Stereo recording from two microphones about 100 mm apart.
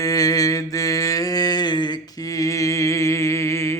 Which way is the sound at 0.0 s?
35° left (ahead or behind).